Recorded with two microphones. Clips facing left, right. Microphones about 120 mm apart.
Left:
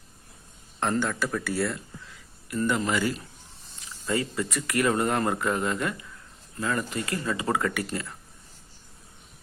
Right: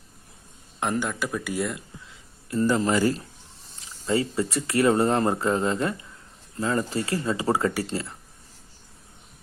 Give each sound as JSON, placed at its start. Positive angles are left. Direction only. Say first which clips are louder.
{"t": 0.8, "sound": "speech", "louder": "even", "side_deg": -15}
{"t": 2.5, "sound": "speech", "louder": "right 4 dB", "side_deg": -30}
{"t": 3.8, "sound": "speech", "louder": "right 3 dB", "side_deg": -25}